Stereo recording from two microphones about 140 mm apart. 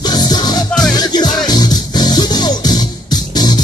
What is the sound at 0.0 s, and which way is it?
Music, 30° left (ahead or behind).